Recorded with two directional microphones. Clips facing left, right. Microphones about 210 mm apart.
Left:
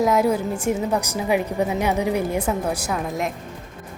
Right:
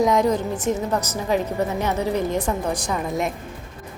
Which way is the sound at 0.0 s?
5° left (ahead or behind).